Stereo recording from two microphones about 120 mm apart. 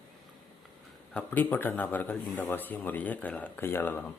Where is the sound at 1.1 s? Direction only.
10° left (ahead or behind).